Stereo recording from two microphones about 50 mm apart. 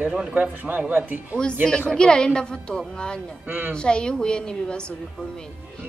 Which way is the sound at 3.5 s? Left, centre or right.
Right.